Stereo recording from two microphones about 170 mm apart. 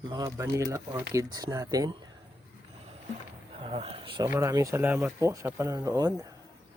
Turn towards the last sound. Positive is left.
turn(degrees=-20)  # may be behind; listen again after turning